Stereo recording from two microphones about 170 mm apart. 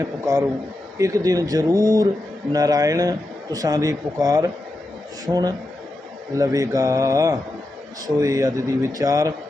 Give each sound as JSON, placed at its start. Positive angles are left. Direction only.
{"t": 0.0, "sound": "a man's voice", "side_deg": -20}